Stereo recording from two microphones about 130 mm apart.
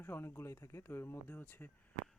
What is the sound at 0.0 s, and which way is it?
Speech, 15° left (ahead or behind).